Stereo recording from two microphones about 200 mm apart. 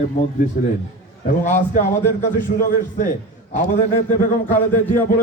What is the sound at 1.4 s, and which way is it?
A man's voice, 35° left (ahead or behind).